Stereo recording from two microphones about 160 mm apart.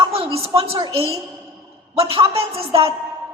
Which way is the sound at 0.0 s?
35° right (ahead or behind).